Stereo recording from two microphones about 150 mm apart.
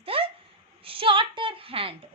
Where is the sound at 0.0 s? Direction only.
40° right (ahead or behind).